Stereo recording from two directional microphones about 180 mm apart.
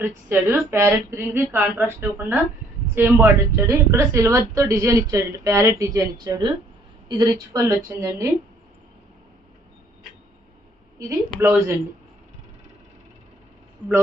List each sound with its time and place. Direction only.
0.0 s a woman's voice: 10° right (ahead or behind)
11.1 s a woman's voice: 15° right (ahead or behind)